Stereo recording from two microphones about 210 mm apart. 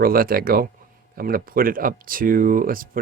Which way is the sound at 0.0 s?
45° right (ahead or behind).